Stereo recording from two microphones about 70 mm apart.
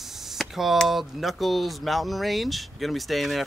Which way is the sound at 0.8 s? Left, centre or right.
Centre.